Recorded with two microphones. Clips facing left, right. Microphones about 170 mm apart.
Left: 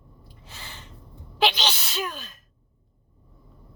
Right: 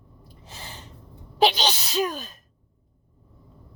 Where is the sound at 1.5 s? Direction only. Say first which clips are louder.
Right 5 dB; 35° right (ahead or behind).